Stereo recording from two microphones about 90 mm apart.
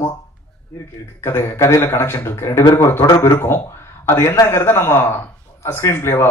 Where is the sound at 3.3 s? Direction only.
25° left (ahead or behind).